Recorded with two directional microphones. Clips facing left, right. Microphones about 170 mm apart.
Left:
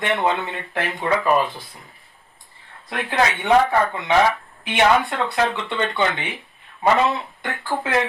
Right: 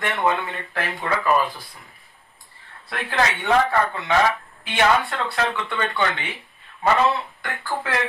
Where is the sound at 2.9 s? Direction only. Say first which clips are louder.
Left 2 dB; 15° left (ahead or behind).